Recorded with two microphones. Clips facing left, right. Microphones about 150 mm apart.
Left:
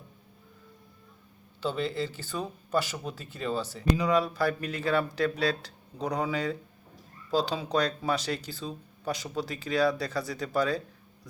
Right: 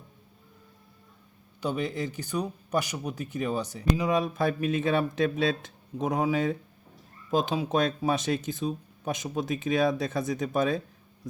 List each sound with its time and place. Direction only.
1.6 s speech: 15° right (ahead or behind)